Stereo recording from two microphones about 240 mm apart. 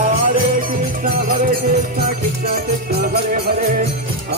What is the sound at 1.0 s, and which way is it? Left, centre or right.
Music, right.